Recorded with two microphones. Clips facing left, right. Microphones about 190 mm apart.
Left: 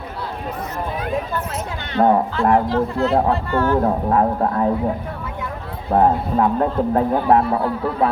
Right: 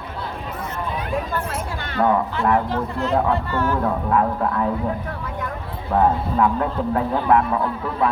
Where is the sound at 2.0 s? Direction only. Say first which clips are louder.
Left 4 dB; 35° left (ahead or behind).